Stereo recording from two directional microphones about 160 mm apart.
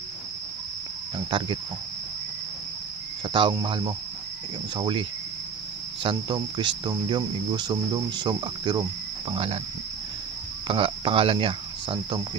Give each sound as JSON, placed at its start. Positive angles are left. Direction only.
{"t": 1.1, "sound": "speech", "side_deg": -30}
{"t": 3.3, "sound": "speech", "side_deg": -30}
{"t": 4.7, "sound": "cricket", "side_deg": -30}
{"t": 6.0, "sound": "cricket", "side_deg": -30}
{"t": 9.3, "sound": "speech", "side_deg": -40}
{"t": 10.7, "sound": "speech", "side_deg": -35}